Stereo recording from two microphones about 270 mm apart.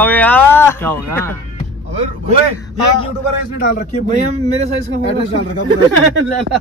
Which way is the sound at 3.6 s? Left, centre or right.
Left.